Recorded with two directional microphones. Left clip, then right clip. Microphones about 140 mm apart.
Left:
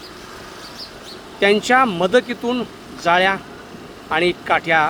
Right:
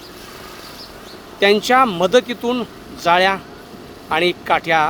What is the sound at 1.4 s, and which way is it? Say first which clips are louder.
Speech: right 1 dB; 25° right (ahead or behind).